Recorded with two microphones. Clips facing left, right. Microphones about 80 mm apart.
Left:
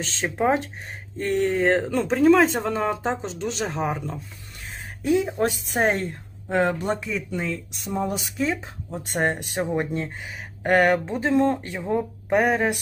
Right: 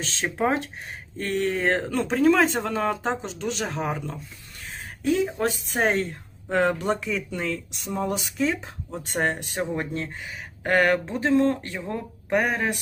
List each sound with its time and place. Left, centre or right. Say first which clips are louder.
0.0 s speech: left 2 dB; centre
5.0 s speech: left 2 dB; centre
6.5 s speech: even; centre
12.3 s speech: left 3 dB; centre